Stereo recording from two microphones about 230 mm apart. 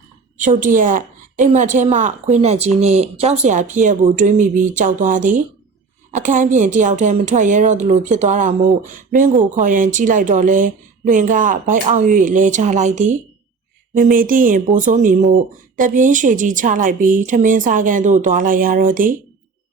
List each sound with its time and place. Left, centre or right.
0.3 s a woman's voice: right